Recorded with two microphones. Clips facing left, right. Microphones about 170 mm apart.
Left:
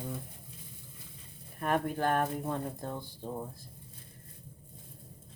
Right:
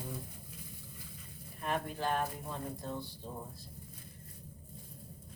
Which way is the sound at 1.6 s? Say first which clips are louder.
Left 6 dB; 55° left (ahead or behind).